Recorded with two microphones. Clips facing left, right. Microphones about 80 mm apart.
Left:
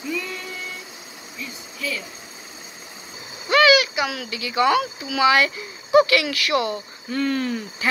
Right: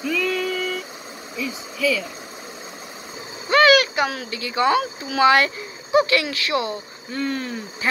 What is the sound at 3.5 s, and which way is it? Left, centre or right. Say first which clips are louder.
Speech: right 1 dB; right.